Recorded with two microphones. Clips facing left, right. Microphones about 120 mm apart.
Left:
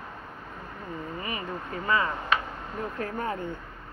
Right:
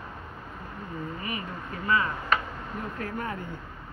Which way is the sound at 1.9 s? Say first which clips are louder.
Even; 30° left (ahead or behind).